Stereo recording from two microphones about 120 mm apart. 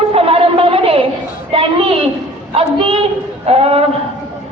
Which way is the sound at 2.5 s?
50° right (ahead or behind).